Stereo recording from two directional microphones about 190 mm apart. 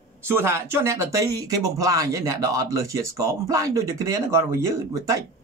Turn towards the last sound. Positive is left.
turn(degrees=-20)  # may be behind; listen again after turning